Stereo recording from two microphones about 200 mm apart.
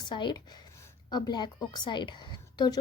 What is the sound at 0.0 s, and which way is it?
A woman's voice, 25° left (ahead or behind).